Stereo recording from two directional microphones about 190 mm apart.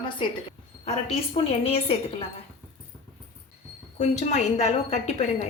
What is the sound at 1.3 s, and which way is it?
Speech, 30° left (ahead or behind).